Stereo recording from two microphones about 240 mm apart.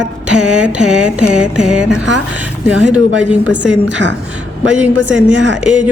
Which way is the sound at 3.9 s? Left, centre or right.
Right.